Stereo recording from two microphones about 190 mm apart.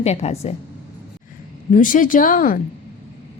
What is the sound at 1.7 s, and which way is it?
Speech, 45° left (ahead or behind).